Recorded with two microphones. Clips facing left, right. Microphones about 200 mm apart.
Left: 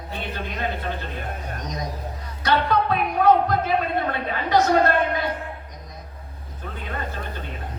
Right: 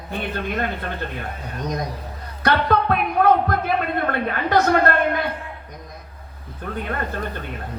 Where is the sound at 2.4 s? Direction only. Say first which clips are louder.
Right 2 dB; 55° right (ahead or behind).